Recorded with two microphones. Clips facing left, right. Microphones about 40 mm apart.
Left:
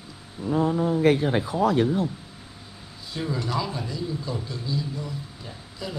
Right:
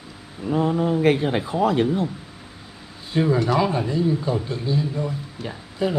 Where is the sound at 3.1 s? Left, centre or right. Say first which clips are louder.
Right 9 dB; right.